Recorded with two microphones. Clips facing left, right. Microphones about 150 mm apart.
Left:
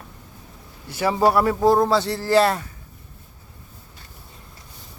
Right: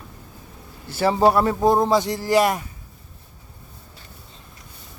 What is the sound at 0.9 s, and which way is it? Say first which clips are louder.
A man's voice: right 2 dB; 30° right (ahead or behind).